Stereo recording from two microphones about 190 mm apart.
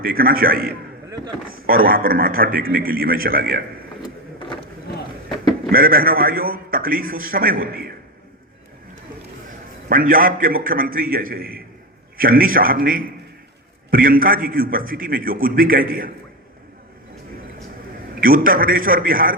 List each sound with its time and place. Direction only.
0.0 s a man's voice: 50° right (ahead or behind)
1.1 s speech: 20° right (ahead or behind)
1.6 s a man's voice: 50° right (ahead or behind)
5.7 s a man's voice: 50° right (ahead or behind)
9.9 s a man's voice: 50° right (ahead or behind)
18.1 s a man's voice: 50° right (ahead or behind)